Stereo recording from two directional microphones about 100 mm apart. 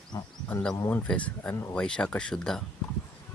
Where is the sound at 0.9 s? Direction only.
10° left (ahead or behind).